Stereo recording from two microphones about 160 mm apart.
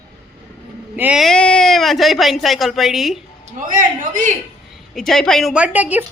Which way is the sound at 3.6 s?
55° right (ahead or behind).